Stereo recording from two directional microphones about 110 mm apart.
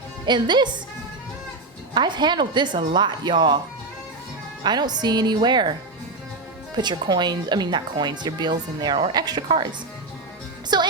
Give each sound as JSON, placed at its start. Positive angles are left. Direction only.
{"t": 0.3, "sound": "speech", "side_deg": -45}
{"t": 1.9, "sound": "speech", "side_deg": -45}
{"t": 4.6, "sound": "speech", "side_deg": -40}
{"t": 6.7, "sound": "speech", "side_deg": -40}
{"t": 10.7, "sound": "music", "side_deg": -40}